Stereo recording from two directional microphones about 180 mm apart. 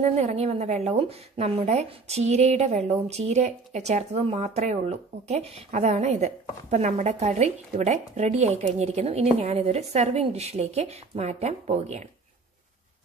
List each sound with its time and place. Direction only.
0.0 s speech: 35° right (ahead or behind)